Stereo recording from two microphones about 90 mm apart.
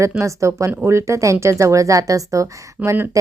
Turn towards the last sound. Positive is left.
turn(degrees=-25)  # may be behind; listen again after turning